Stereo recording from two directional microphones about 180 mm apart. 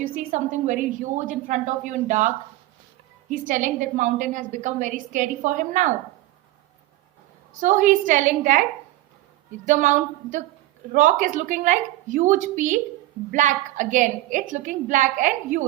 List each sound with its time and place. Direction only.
0.0 s a woman's voice: 45° right (ahead or behind)
7.6 s a woman's voice: 45° right (ahead or behind)
9.6 s a woman's voice: 45° right (ahead or behind)